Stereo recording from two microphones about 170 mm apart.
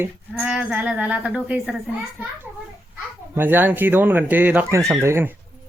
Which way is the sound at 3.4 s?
10° right (ahead or behind).